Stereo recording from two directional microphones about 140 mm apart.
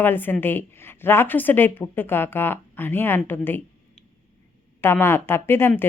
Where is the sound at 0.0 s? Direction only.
15° left (ahead or behind).